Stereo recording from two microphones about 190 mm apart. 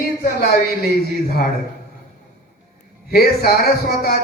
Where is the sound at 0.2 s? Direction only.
55° left (ahead or behind).